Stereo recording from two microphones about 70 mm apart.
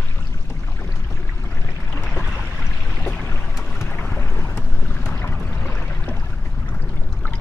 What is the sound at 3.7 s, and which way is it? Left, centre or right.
Boat, left.